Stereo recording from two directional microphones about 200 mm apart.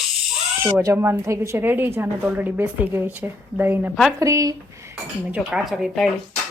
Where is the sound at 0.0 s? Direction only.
Centre (ahead or behind).